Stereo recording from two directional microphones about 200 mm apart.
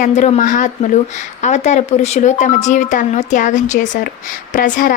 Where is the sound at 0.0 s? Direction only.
35° left (ahead or behind).